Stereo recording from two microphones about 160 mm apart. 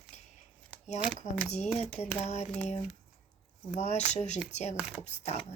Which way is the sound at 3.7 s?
45° left (ahead or behind).